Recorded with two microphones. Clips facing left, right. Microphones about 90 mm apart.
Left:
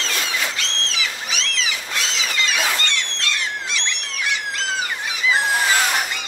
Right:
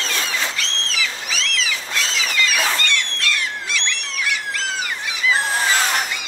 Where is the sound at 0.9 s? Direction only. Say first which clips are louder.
Right 1 dB; 25° left (ahead or behind).